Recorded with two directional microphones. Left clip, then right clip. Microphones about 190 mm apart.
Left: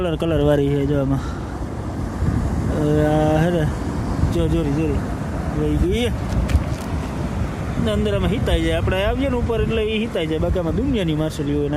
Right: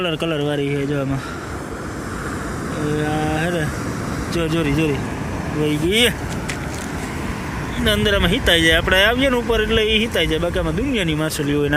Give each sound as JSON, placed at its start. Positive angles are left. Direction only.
{"t": 0.0, "sound": "speech", "side_deg": 20}
{"t": 2.9, "sound": "mantra", "side_deg": 30}
{"t": 4.4, "sound": "speech", "side_deg": 15}
{"t": 7.9, "sound": "speech", "side_deg": 5}